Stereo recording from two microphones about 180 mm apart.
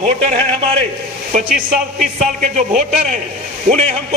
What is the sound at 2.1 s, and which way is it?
A man's voice, 40° right (ahead or behind).